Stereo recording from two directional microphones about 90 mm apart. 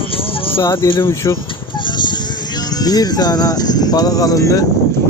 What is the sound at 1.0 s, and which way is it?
Speech, 30° left (ahead or behind).